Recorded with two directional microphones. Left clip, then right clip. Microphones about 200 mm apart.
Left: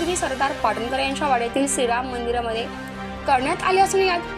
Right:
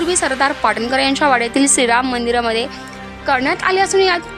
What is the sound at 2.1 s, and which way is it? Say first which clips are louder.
Speech: right 7 dB; 50° right (ahead or behind).